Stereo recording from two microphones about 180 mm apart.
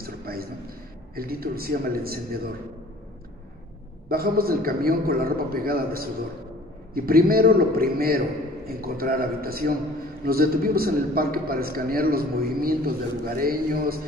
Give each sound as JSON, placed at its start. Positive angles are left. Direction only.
{"t": 0.0, "sound": "a sound", "side_deg": -55}
{"t": 1.1, "sound": "a man's voice", "side_deg": -55}
{"t": 4.1, "sound": "a man's voice", "side_deg": -55}